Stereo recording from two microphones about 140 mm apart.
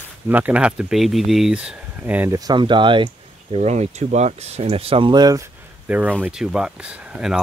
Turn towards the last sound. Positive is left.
turn(degrees=-5)  # may be behind; listen again after turning